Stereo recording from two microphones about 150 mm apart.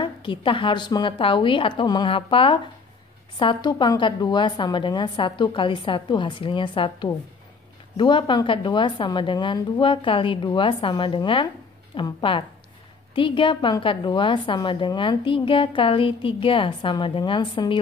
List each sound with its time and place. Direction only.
0.0 s a woman's voice: 35° left (ahead or behind)